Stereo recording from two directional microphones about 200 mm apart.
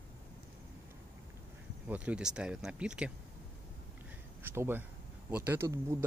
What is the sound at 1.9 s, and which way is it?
Speech, 5° right (ahead or behind).